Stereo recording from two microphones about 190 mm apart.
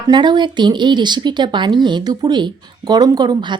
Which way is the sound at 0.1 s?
25° right (ahead or behind).